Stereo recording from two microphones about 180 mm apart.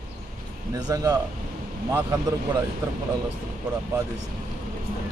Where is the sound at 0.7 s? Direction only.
20° right (ahead or behind).